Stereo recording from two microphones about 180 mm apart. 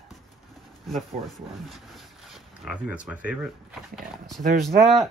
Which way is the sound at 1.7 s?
Centre (ahead or behind).